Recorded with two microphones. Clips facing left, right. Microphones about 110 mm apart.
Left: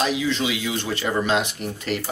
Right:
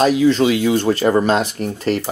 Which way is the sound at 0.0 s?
45° right (ahead or behind).